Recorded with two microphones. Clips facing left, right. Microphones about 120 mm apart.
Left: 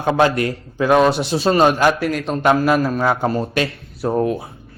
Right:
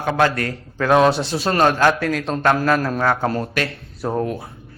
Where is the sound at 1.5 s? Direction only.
10° left (ahead or behind).